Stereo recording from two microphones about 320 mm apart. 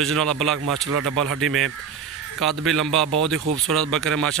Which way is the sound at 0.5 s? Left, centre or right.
Right.